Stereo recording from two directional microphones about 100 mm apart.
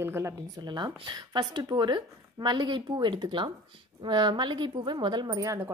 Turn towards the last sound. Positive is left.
turn(degrees=-30)  # may be behind; listen again after turning